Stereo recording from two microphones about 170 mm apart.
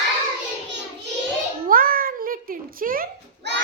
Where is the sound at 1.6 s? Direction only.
55° right (ahead or behind).